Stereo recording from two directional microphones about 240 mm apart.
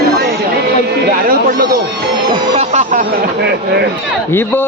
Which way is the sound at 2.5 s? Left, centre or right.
Right.